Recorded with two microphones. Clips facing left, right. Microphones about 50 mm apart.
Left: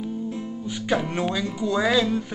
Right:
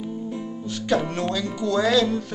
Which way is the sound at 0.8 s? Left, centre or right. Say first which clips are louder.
Right 1 dB; centre.